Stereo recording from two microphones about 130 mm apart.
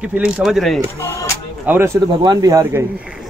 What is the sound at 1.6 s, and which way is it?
Speech, 15° right (ahead or behind).